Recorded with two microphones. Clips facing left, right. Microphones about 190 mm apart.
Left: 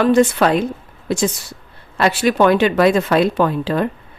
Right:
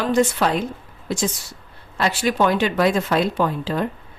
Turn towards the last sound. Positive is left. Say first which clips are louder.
# left 4 dB
turn(degrees=65)  # may be behind; listen again after turning